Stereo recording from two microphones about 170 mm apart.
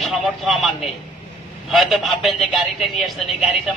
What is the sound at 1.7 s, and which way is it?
Speech, centre (ahead or behind).